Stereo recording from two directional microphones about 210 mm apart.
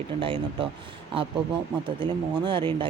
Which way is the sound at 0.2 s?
25° right (ahead or behind).